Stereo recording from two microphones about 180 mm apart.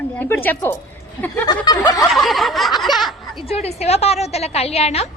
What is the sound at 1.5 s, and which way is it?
Snicker, 25° left (ahead or behind).